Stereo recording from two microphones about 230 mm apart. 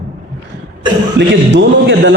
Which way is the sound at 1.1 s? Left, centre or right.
Right.